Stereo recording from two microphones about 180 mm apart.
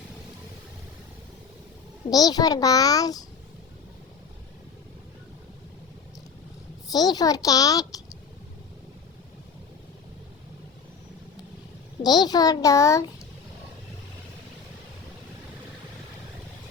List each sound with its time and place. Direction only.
2.0 s a child's voice: 20° left (ahead or behind)
6.9 s a child's voice: 20° left (ahead or behind)
12.0 s a child's voice: 25° left (ahead or behind)